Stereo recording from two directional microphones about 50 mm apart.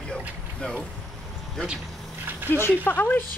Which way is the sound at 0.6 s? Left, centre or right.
Centre.